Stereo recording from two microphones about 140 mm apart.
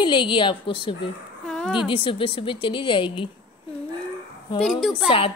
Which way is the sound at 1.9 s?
40° left (ahead or behind).